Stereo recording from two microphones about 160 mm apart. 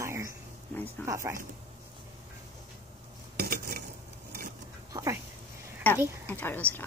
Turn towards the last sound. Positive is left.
turn(degrees=10)  # may be behind; listen again after turning